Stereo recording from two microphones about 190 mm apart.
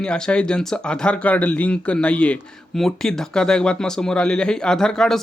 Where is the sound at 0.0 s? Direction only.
5° left (ahead or behind).